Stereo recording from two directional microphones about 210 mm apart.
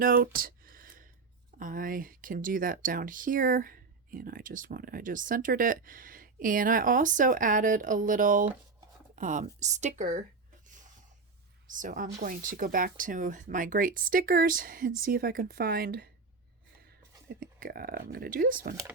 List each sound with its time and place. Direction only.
0.0 s a sound: 45° right (ahead or behind)
1.5 s speech: 40° right (ahead or behind)
11.7 s speech: 40° right (ahead or behind)
17.2 s speech: 45° right (ahead or behind)